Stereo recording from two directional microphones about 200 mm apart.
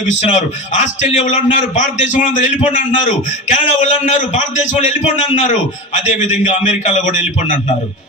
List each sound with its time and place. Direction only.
0.2 s a man's voice: 35° left (ahead or behind)